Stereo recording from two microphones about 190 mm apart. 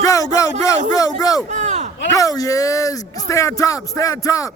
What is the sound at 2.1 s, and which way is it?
Speech, 20° left (ahead or behind).